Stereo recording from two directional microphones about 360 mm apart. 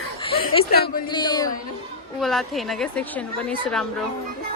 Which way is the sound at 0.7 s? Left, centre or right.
Left.